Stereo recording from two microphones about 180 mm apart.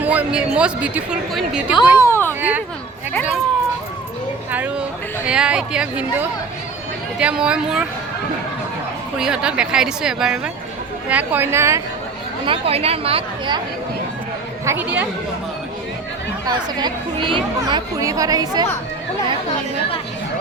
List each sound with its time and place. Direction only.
0.0 s speech: 10° right (ahead or behind)
2.0 s a sound: 15° left (ahead or behind)
2.4 s speech: 10° right (ahead or behind)
4.5 s speech: 10° right (ahead or behind)
9.1 s speech: 5° right (ahead or behind)
12.5 s a woman's voice: 35° right (ahead or behind)
14.6 s speech: 15° right (ahead or behind)
16.5 s speech: 25° right (ahead or behind)